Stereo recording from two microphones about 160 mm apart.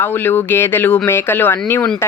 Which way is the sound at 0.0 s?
10° left (ahead or behind).